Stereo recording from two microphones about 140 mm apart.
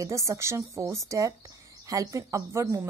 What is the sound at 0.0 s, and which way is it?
A woman's voice, 20° right (ahead or behind).